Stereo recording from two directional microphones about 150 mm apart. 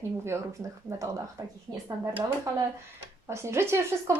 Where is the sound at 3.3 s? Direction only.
20° right (ahead or behind).